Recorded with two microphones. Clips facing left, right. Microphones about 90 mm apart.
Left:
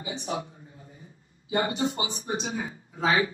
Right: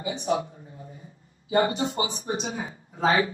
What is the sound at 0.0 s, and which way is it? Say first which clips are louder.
A man's voice: right 6 dB; 40° right (ahead or behind).